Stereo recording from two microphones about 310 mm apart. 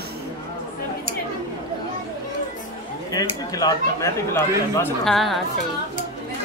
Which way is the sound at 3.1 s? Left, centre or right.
Centre.